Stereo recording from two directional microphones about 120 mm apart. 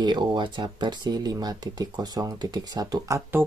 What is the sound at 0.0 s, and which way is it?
Speech, 40° right (ahead or behind).